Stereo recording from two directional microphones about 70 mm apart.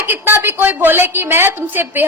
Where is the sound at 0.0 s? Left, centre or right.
Right.